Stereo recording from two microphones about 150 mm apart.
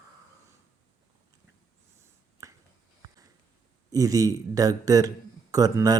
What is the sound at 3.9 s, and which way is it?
Speech, 25° right (ahead or behind).